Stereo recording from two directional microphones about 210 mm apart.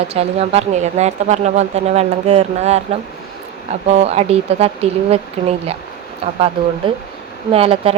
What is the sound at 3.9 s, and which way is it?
Speech, 30° right (ahead or behind).